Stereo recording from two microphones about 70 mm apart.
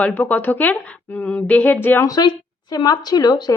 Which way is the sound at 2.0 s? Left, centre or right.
Left.